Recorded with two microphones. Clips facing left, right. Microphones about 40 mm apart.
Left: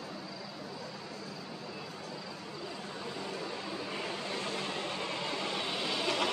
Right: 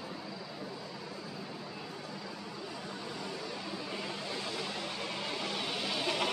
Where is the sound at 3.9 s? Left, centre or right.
Centre.